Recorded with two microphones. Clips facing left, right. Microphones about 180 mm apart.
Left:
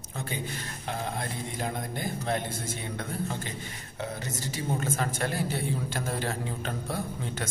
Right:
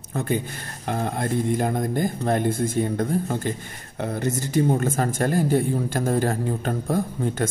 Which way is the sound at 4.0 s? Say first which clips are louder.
Right 9 dB; 55° right (ahead or behind).